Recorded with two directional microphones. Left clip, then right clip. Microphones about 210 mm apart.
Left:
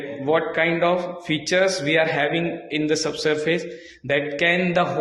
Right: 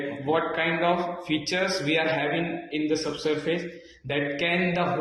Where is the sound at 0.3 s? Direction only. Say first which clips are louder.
Left 5 dB; 50° left (ahead or behind).